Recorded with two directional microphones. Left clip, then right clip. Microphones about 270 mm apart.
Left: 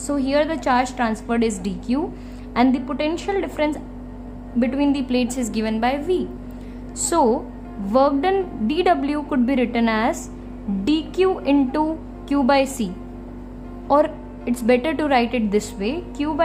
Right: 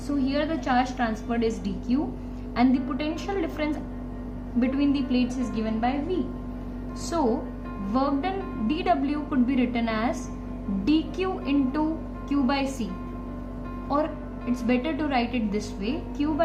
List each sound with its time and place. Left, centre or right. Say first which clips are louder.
0.1 s a woman's voice: left 7 dB; left
13.8 s a woman's voice: left 9 dB; left